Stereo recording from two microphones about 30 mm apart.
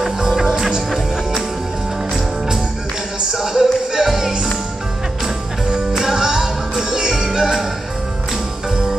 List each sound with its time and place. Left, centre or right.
0.3 s music: centre
3.3 s music: centre
7.2 s music: centre